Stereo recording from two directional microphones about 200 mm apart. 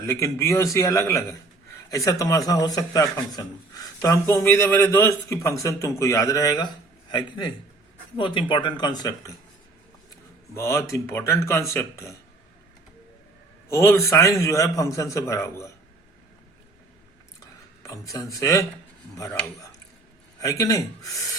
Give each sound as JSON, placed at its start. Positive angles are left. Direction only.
{"t": 0.0, "sound": "a man's voice", "side_deg": 15}
{"t": 10.5, "sound": "a man's voice", "side_deg": 15}
{"t": 13.7, "sound": "a man's voice", "side_deg": 15}
{"t": 17.8, "sound": "a man's voice", "side_deg": 15}
{"t": 20.4, "sound": "a man's voice", "side_deg": 15}